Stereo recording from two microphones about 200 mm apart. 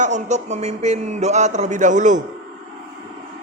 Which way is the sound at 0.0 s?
35° right (ahead or behind).